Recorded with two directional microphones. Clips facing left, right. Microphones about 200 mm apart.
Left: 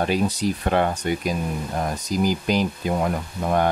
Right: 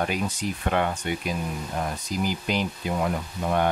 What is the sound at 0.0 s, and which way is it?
Speech, 35° left (ahead or behind).